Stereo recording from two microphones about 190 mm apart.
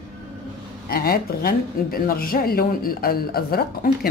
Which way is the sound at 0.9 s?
50° left (ahead or behind).